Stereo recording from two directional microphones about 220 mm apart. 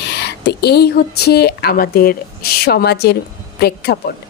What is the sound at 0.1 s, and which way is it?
A woman's voice, 50° left (ahead or behind).